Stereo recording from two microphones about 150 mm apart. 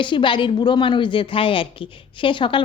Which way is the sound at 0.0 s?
35° left (ahead or behind).